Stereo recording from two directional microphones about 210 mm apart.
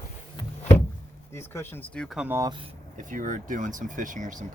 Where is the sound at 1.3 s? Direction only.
10° left (ahead or behind).